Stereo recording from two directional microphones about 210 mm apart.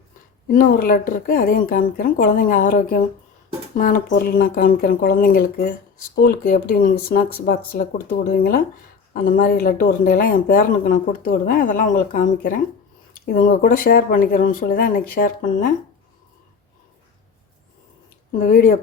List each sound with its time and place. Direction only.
0.4 s speech: 45° left (ahead or behind)
18.4 s speech: 40° left (ahead or behind)